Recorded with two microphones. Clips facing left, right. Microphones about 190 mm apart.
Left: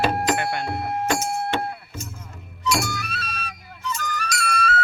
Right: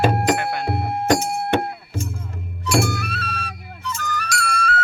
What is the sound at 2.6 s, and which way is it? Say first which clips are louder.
Music: right 4 dB; 50° right (ahead or behind).